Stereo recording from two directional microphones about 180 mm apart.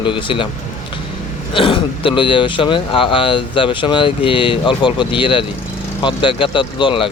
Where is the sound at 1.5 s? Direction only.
30° left (ahead or behind).